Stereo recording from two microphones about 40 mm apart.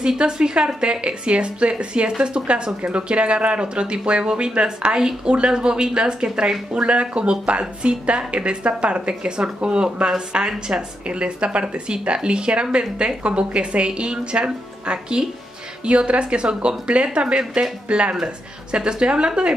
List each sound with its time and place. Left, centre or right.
0.2 s a woman's voice: right